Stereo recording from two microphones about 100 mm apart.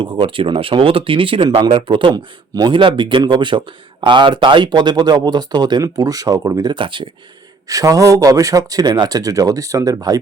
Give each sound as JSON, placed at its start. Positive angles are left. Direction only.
{"t": 0.0, "sound": "speech", "side_deg": -60}
{"t": 2.1, "sound": "a man's voice", "side_deg": -45}
{"t": 7.7, "sound": "speech", "side_deg": -35}